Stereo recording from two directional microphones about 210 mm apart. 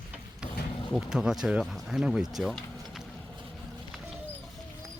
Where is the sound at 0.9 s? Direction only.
5° right (ahead or behind).